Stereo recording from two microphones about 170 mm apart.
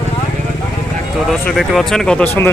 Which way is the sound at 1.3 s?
Centre (ahead or behind).